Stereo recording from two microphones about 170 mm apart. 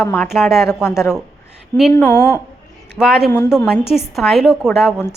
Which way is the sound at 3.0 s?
Centre (ahead or behind).